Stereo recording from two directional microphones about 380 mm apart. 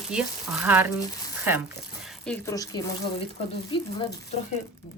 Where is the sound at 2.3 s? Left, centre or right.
Centre.